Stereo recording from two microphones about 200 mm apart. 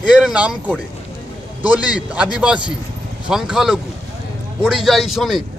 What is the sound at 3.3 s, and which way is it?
Speech, 5° right (ahead or behind).